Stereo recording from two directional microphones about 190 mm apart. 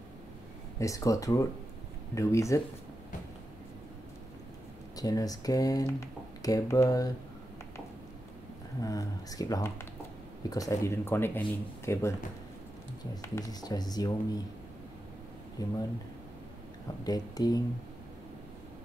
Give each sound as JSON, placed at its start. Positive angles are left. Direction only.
{"t": 0.7, "sound": "speech", "side_deg": 15}
{"t": 4.9, "sound": "speech", "side_deg": 20}
{"t": 8.8, "sound": "speech", "side_deg": 20}
{"t": 15.6, "sound": "speech", "side_deg": 20}
{"t": 17.0, "sound": "speech", "side_deg": 20}